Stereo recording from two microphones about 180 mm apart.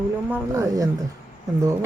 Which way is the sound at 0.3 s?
15° right (ahead or behind).